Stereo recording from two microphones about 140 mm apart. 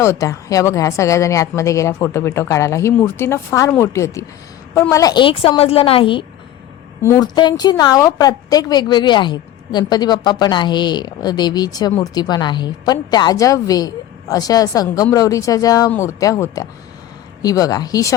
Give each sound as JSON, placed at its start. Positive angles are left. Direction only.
{"t": 0.0, "sound": "a woman's voice", "side_deg": 20}
{"t": 7.0, "sound": "a woman's voice", "side_deg": 20}
{"t": 7.3, "sound": "a woman's voice", "side_deg": 30}